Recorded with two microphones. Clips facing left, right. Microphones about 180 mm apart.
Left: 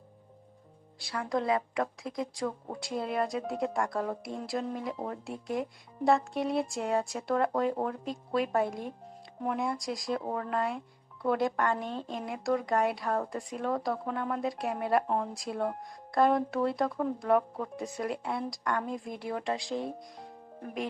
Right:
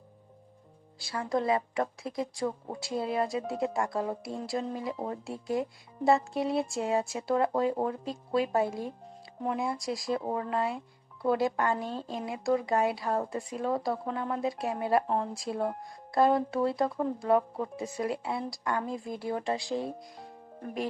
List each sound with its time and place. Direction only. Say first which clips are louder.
0.9 s speech: right 1 dB; centre (ahead or behind)
5.3 s speech: right 3 dB; 25° right (ahead or behind)
6.1 s speech: right 1 dB; 5° right (ahead or behind)